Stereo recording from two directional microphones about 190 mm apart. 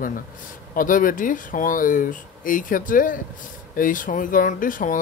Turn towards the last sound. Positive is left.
turn(degrees=45)  # may be behind; listen again after turning